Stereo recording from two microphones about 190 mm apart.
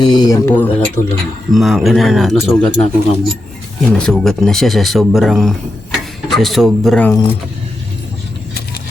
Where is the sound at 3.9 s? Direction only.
5° left (ahead or behind).